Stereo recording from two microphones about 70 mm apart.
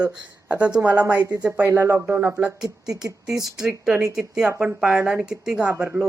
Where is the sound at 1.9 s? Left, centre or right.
Right.